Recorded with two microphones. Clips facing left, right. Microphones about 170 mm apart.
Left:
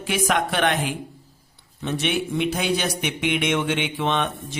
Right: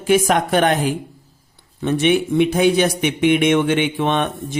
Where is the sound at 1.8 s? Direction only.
55° right (ahead or behind).